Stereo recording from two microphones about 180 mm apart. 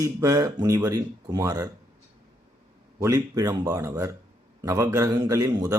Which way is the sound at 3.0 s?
20° right (ahead or behind).